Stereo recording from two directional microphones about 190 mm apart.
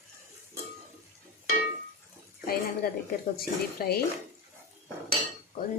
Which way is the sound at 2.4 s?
55° left (ahead or behind).